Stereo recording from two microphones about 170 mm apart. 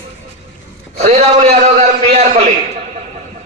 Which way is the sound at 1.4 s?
40° right (ahead or behind).